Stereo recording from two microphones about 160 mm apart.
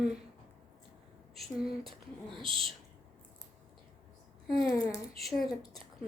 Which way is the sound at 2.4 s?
35° right (ahead or behind).